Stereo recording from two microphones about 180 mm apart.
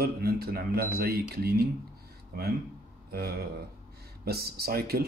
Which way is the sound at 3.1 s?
60° right (ahead or behind).